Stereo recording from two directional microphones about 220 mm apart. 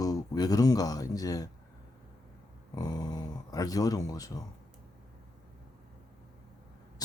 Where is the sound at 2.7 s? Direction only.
15° left (ahead or behind).